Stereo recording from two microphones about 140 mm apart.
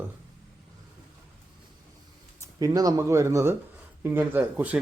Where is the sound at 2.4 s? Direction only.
25° right (ahead or behind).